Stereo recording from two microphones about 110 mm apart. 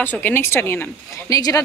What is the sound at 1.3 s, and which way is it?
Speech, 35° left (ahead or behind).